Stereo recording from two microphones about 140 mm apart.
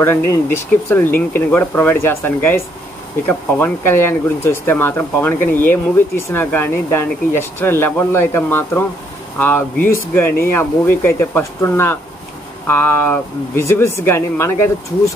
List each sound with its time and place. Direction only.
0.0 s speech: 20° left (ahead or behind)